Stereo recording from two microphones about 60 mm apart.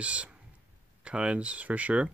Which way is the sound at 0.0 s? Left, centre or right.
Centre.